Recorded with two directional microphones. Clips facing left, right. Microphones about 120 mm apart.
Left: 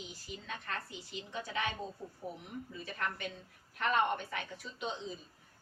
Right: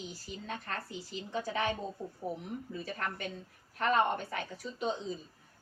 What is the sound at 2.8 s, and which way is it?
A woman's voice, 40° right (ahead or behind).